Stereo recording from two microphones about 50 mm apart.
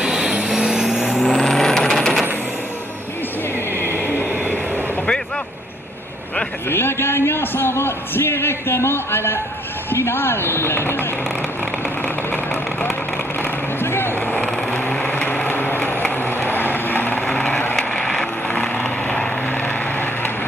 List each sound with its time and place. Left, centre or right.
0.0 s vehicle: centre
1.2 s vehicle: centre
3.7 s a sound: right
6.7 s a man's voice: left
13.4 s vehicle: left
14.2 s vehicle: left
15.7 s vehicle: left
17.3 s vehicle: centre